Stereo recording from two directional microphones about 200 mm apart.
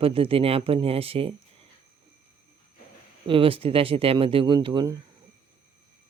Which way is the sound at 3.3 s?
25° right (ahead or behind).